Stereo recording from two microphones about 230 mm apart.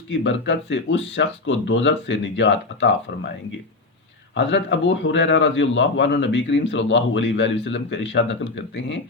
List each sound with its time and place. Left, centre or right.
0.1 s a man's voice: left
4.4 s a man's voice: left